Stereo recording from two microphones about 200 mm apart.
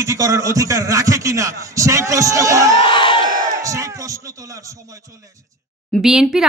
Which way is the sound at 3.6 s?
15° right (ahead or behind).